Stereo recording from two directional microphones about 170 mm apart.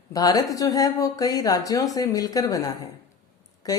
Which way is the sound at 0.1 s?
20° left (ahead or behind).